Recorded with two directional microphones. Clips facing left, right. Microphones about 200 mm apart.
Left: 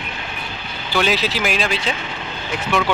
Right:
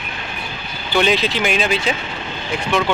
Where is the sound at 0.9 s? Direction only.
5° left (ahead or behind).